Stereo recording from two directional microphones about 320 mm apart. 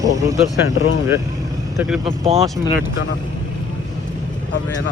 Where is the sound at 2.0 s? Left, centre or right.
Centre.